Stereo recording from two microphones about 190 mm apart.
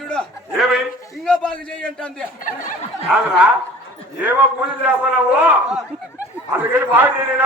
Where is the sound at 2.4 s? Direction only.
45° left (ahead or behind).